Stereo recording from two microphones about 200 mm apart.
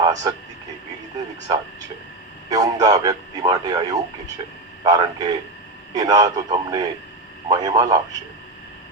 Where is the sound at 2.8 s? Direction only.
20° right (ahead or behind).